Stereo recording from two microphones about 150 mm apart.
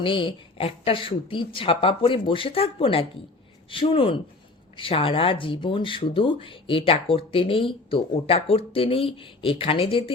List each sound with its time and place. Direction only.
0.0 s speech: 35° left (ahead or behind)